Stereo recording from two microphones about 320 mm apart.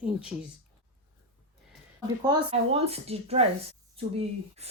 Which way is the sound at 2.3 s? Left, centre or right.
Centre.